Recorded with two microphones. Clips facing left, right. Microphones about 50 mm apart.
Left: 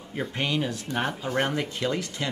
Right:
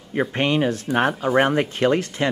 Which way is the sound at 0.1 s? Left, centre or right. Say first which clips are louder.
Right 8 dB; right.